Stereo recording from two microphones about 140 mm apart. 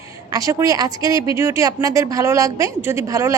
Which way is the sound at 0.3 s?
25° right (ahead or behind).